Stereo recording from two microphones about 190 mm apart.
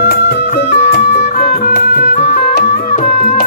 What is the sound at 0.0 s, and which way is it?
Music, 55° left (ahead or behind).